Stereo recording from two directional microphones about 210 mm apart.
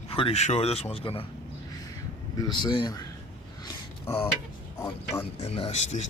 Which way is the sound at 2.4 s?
20° left (ahead or behind).